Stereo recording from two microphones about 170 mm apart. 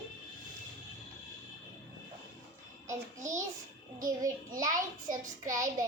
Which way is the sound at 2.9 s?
20° right (ahead or behind).